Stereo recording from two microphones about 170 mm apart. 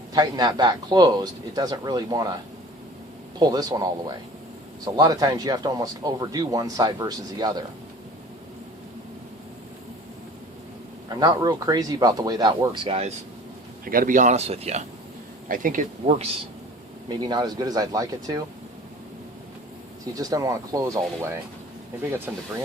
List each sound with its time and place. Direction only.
0.1 s speech: 25° right (ahead or behind)
3.3 s speech: 25° right (ahead or behind)
11.1 s speech: 20° right (ahead or behind)
13.8 s speech: 55° right (ahead or behind); by 14.8 s 40° right (ahead or behind)
15.4 s speech: 55° right (ahead or behind)
17.1 s speech: 25° right (ahead or behind)
20.1 s speech: 20° right (ahead or behind)
22.3 s speech: 10° right (ahead or behind)